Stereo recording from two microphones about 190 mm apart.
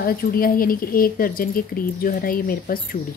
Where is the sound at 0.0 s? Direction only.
50° left (ahead or behind).